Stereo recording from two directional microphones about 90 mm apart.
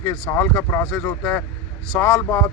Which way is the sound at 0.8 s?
15° left (ahead or behind).